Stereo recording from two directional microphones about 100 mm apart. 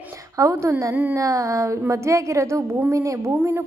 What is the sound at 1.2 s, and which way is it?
A woman's voice, 35° right (ahead or behind).